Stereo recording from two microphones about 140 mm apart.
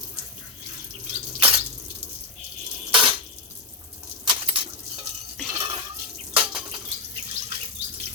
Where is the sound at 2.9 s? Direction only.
35° right (ahead or behind).